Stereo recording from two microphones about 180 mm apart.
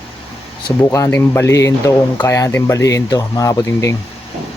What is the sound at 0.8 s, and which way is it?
Speech, 15° left (ahead or behind).